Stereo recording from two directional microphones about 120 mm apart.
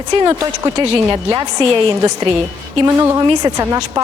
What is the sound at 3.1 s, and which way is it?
Speech, 30° right (ahead or behind).